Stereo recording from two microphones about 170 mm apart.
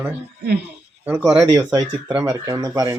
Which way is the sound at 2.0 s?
10° right (ahead or behind).